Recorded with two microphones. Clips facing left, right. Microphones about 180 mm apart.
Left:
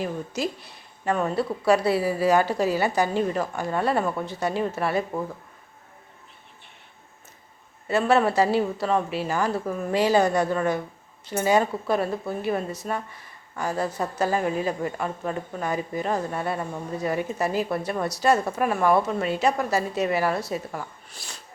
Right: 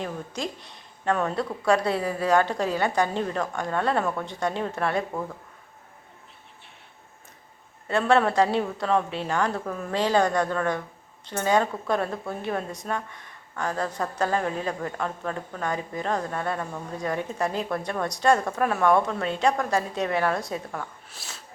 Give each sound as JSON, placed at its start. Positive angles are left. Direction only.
{"t": 0.0, "sound": "speech", "side_deg": 5}
{"t": 7.9, "sound": "a woman's voice", "side_deg": 5}